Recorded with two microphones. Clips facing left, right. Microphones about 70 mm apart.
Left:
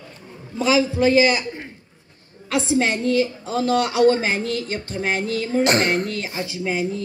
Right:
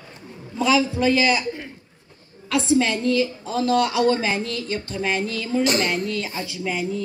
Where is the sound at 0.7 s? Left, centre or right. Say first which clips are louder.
Left 2 dB; centre.